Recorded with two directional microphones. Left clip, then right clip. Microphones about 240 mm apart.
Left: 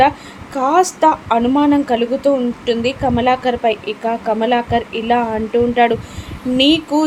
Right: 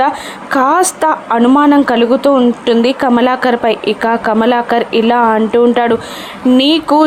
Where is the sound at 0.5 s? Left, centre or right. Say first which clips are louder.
Right 4 dB; right.